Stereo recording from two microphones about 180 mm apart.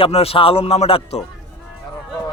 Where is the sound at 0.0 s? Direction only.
35° left (ahead or behind).